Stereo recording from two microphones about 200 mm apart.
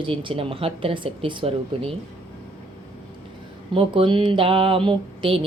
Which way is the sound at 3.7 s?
25° right (ahead or behind).